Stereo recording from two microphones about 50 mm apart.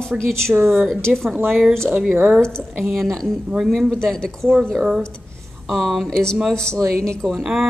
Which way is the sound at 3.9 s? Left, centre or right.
Centre.